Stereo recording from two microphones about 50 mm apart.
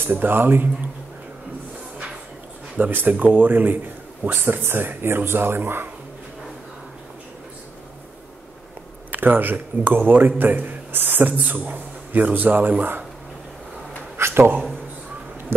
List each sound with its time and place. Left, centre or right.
0.0 s speech: right
2.8 s speech: right
9.1 s a man's voice: right
14.1 s a sound: right